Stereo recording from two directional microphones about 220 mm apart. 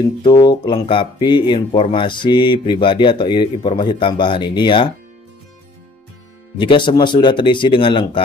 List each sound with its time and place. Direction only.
0.2 s speech: 20° left (ahead or behind)
6.6 s speech: 20° left (ahead or behind)